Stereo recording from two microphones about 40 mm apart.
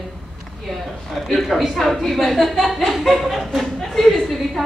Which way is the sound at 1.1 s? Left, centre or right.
Centre.